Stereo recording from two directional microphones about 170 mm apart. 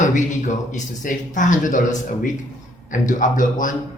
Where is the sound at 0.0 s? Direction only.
45° left (ahead or behind).